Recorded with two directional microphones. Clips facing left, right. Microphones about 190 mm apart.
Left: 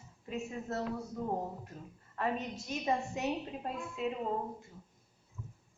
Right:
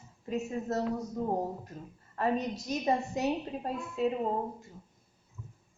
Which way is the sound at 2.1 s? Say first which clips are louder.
Right 5 dB; 40° right (ahead or behind).